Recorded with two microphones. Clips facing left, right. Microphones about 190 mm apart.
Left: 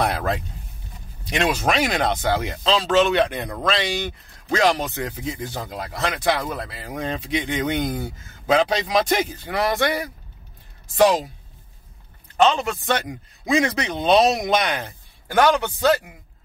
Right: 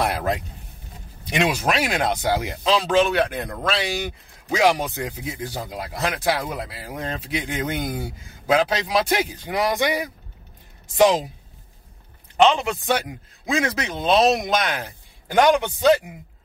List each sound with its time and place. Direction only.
0.0 s speech: 10° right (ahead or behind)
12.4 s a man's voice: 20° right (ahead or behind)
12.8 s speech: 10° right (ahead or behind)
15.2 s speech: 20° right (ahead or behind)